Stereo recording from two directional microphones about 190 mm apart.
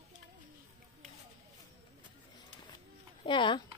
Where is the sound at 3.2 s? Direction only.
25° left (ahead or behind).